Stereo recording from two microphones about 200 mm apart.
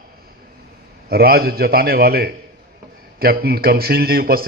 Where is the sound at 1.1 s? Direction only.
50° right (ahead or behind).